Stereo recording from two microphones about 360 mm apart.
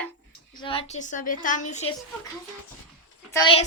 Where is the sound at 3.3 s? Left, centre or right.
Centre.